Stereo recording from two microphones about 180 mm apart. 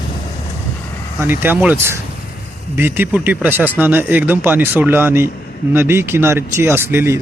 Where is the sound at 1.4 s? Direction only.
10° right (ahead or behind).